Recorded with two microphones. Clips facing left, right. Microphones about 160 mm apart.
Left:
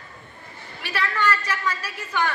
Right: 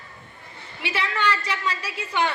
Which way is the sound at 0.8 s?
20° right (ahead or behind).